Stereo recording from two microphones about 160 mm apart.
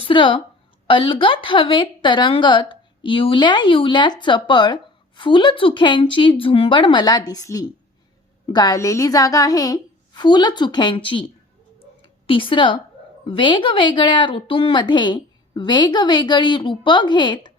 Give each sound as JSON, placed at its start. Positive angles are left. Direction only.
{"t": 0.0, "sound": "a woman's voice", "side_deg": 30}
{"t": 11.8, "sound": "a sound", "side_deg": 35}
{"t": 13.2, "sound": "a woman's voice", "side_deg": 30}